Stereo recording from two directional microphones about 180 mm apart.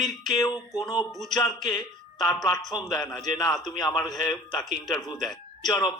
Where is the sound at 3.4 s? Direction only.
Centre (ahead or behind).